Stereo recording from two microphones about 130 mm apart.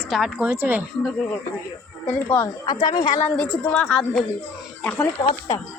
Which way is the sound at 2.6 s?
30° left (ahead or behind).